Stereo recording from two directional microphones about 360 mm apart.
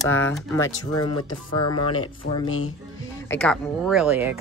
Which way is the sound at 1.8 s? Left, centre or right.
Left.